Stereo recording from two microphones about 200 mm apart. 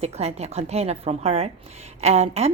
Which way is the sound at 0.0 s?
35° right (ahead or behind).